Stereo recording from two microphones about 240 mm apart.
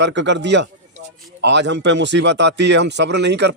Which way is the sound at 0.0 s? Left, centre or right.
Right.